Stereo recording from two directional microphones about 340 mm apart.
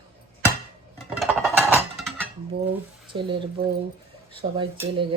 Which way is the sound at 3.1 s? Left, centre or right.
Centre.